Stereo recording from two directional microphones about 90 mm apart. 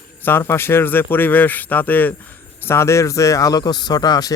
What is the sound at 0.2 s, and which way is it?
Speech, 25° left (ahead or behind).